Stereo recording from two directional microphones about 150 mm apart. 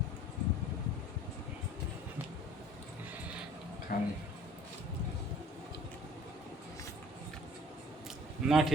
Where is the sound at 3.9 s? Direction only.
70° left (ahead or behind).